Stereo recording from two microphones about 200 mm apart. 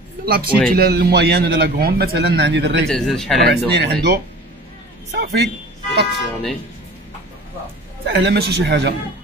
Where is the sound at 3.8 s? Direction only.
55° right (ahead or behind).